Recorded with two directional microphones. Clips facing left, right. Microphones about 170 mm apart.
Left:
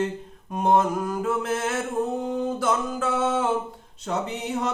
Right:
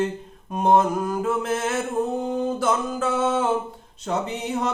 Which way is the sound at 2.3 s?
25° right (ahead or behind).